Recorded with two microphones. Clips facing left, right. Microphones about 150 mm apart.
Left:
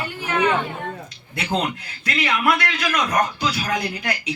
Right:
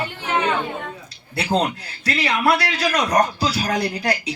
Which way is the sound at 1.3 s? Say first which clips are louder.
Right 3 dB; 35° right (ahead or behind).